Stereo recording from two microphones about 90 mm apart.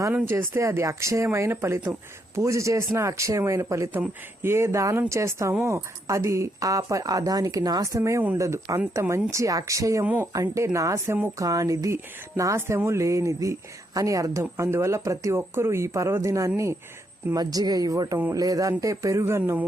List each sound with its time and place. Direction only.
0.1 s a woman's voice: 25° right (ahead or behind)
17.3 s a woman's voice: 45° right (ahead or behind)
19.2 s speech: 25° right (ahead or behind)